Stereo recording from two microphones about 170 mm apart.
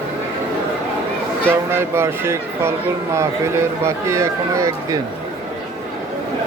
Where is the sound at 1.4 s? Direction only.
15° right (ahead or behind).